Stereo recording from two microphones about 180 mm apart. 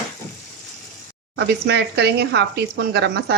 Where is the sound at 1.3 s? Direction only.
70° right (ahead or behind).